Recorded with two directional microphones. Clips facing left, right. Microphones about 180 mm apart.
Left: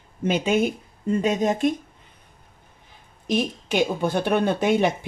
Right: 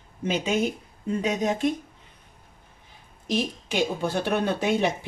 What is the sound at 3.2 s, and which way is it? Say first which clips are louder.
Speech: left 3 dB; 55° left (ahead or behind).